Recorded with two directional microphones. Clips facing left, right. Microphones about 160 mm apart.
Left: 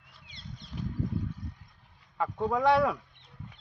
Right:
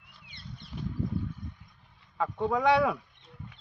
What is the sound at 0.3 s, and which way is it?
Rodents, 65° right (ahead or behind).